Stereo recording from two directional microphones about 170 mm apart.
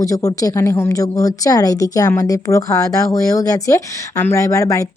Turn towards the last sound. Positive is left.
turn(degrees=20)  # may be behind; listen again after turning